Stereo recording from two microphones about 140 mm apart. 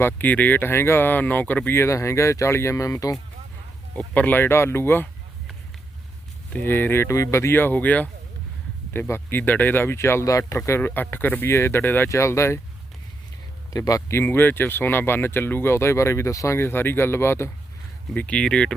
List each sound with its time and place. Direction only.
0.0 s speech: 15° left (ahead or behind)
3.9 s speech: 10° left (ahead or behind)
6.5 s speech: 15° left (ahead or behind)
13.7 s speech: 25° left (ahead or behind); by 18.7 s 5° left (ahead or behind)